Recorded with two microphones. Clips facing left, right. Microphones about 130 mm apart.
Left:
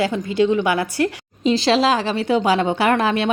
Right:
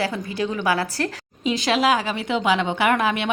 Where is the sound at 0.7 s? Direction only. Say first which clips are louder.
Left 2 dB; 35° right (ahead or behind).